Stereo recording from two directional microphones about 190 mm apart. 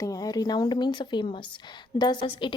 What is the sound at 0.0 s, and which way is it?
A woman's voice, 20° left (ahead or behind).